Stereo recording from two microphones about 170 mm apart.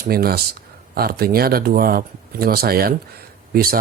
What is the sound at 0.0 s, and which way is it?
Speech, 60° right (ahead or behind).